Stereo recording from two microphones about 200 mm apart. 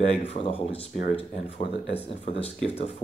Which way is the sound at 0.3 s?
30° left (ahead or behind).